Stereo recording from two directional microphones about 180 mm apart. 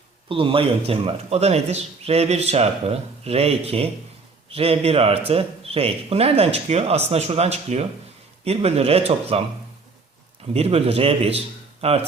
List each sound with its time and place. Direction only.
0.3 s a man's voice: 30° right (ahead or behind)
10.5 s a man's voice: 35° right (ahead or behind)